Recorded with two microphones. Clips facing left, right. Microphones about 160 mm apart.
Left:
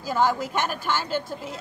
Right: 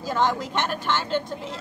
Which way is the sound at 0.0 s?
10° left (ahead or behind).